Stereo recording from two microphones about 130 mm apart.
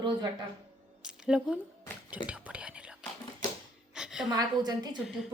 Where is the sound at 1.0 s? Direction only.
5° right (ahead or behind).